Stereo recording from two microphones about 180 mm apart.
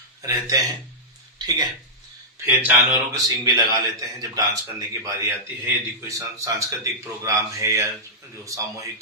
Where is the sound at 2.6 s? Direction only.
10° right (ahead or behind).